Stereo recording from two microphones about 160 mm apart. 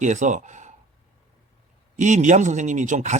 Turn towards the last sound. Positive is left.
turn(degrees=-50)  # may be behind; listen again after turning